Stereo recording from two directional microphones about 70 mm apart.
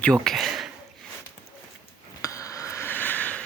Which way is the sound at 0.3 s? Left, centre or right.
Centre.